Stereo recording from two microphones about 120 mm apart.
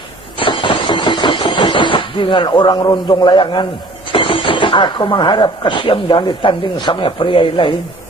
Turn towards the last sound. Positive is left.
turn(degrees=45)  # may be behind; listen again after turning